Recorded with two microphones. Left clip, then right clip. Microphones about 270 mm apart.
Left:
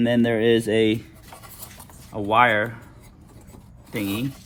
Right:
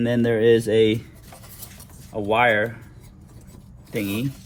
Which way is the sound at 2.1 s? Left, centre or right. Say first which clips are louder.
Left 1 dB; left.